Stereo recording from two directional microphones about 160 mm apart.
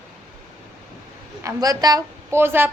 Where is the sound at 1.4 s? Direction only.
20° right (ahead or behind).